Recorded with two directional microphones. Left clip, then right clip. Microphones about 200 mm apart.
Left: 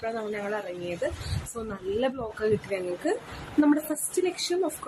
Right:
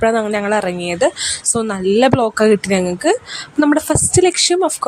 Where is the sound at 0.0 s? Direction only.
55° right (ahead or behind).